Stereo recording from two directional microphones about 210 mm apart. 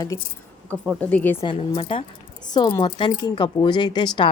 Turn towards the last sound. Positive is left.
turn(degrees=20)  # may be behind; listen again after turning